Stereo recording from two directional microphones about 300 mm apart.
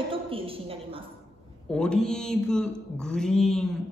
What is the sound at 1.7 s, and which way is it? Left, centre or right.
Mantra, centre.